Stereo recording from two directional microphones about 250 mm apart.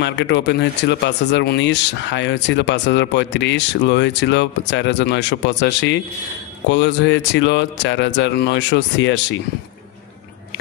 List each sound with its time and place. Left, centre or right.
0.0 s speech: left